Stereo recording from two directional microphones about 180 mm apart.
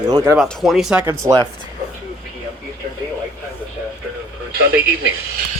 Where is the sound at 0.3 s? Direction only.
Centre (ahead or behind).